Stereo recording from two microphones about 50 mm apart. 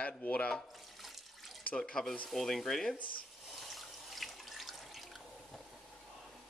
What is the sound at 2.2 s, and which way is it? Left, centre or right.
Speech, centre.